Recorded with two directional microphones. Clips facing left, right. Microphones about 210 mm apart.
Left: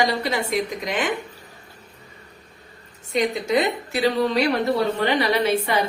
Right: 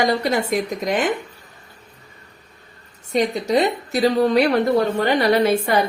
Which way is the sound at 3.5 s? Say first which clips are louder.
Right 3 dB; 35° right (ahead or behind).